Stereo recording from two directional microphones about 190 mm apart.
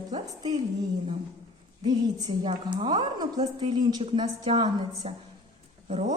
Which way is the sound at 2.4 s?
25° right (ahead or behind).